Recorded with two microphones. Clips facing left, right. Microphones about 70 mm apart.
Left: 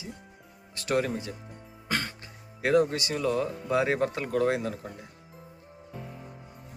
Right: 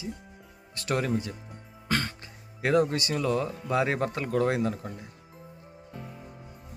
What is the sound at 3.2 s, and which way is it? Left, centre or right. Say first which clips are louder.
Speech: left 2 dB; centre.